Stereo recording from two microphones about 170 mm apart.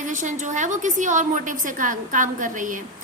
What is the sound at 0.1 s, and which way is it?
A woman's voice, 45° right (ahead or behind).